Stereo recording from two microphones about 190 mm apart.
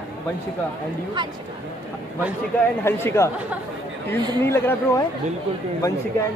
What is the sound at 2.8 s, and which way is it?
Speech, 10° left (ahead or behind).